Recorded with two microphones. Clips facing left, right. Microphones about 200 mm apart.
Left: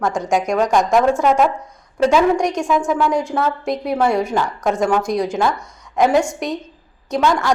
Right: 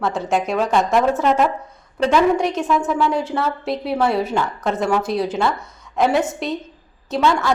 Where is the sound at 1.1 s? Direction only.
10° left (ahead or behind).